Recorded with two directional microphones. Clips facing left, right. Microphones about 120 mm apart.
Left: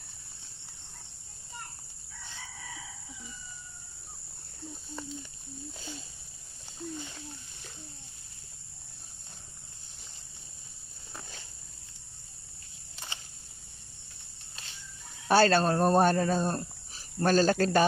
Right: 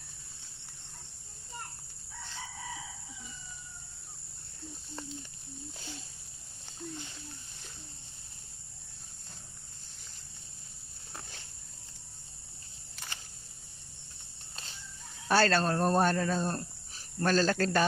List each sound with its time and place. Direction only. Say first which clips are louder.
15.2 s speech: left 4 dB; 15° left (ahead or behind)